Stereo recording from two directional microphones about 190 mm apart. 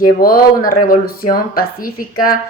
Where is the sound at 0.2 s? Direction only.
50° left (ahead or behind).